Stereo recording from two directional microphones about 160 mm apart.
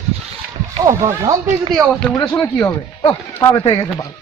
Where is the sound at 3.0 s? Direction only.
25° left (ahead or behind).